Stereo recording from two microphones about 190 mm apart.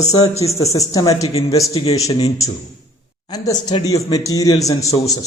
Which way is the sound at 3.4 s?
20° left (ahead or behind).